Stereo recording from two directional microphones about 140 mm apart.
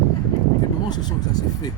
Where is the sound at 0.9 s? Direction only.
30° left (ahead or behind).